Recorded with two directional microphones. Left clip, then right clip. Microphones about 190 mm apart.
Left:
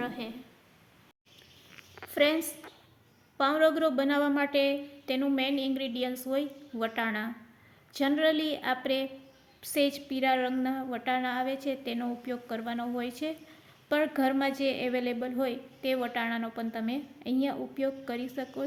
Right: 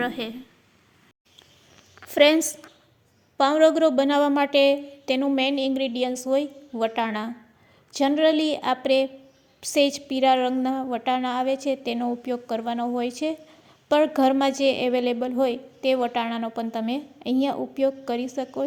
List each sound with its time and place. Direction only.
0.0 s a woman's voice: 40° right (ahead or behind)
2.0 s a woman's voice: 40° right (ahead or behind)